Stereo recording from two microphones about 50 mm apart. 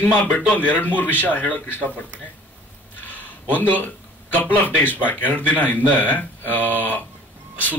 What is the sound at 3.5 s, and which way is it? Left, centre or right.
Speech, left.